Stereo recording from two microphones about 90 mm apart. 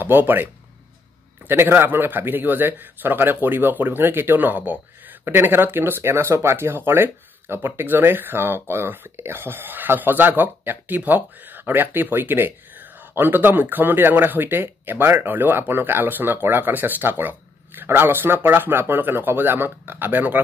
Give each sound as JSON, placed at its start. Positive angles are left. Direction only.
{"t": 0.0, "sound": "speech", "side_deg": -20}
{"t": 1.5, "sound": "speech", "side_deg": -25}